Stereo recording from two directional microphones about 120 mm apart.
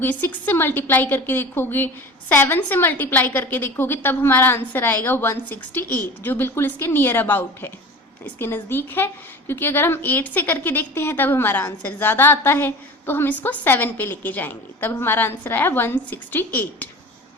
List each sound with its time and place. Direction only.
0.0 s a woman's voice: 15° left (ahead or behind)